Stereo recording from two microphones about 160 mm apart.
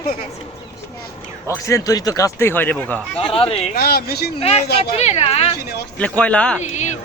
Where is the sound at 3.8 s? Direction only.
80° left.